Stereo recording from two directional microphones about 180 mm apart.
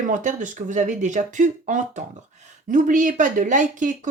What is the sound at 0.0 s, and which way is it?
Speech, 45° right (ahead or behind).